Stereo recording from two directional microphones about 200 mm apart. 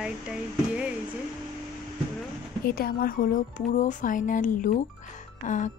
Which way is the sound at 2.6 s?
50° left (ahead or behind).